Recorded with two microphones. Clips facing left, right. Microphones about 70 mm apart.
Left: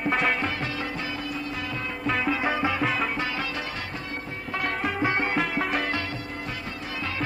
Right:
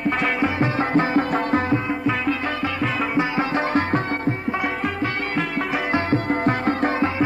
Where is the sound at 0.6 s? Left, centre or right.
Right.